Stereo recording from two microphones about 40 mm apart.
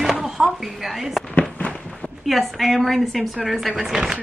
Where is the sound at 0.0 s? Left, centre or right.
Centre.